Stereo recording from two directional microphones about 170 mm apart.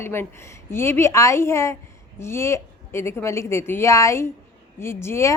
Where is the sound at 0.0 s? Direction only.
15° left (ahead or behind).